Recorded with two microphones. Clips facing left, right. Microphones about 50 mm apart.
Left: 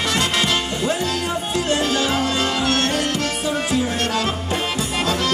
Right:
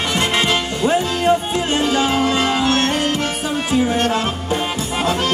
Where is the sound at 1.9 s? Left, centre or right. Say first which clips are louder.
Right 3 dB; right.